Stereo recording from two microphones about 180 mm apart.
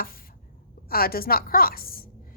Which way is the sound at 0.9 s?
55° left (ahead or behind).